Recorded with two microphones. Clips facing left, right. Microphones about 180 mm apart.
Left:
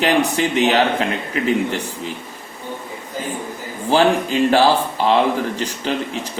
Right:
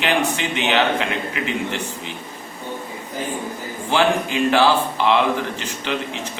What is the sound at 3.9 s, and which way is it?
A man's voice, 35° left (ahead or behind).